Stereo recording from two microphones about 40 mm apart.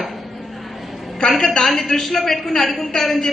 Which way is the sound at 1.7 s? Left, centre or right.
Centre.